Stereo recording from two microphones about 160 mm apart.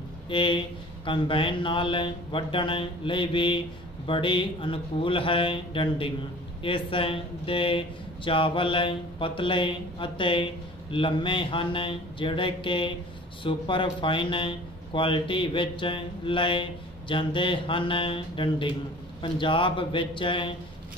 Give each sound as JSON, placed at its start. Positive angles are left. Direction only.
{"t": 0.3, "sound": "speech", "side_deg": 30}